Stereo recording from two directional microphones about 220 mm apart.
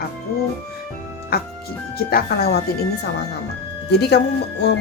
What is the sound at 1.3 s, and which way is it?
Speech, 45° left (ahead or behind).